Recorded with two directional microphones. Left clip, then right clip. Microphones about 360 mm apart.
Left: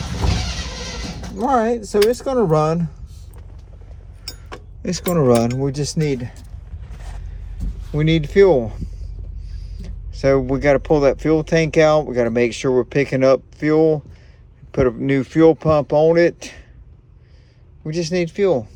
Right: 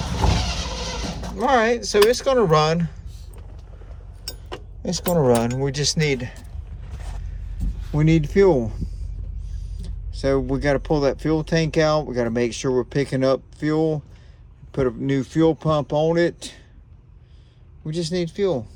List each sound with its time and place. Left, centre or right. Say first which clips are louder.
0.0 s vehicle: right 1 dB; right
1.4 s speech: left 1 dB; centre
4.8 s speech: left 2 dB; centre
7.9 s speech: left 1 dB; centre
10.2 s speech: left 5 dB; centre
17.8 s speech: left 4 dB; centre